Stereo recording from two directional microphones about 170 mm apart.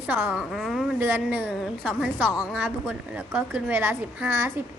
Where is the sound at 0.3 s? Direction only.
Centre (ahead or behind).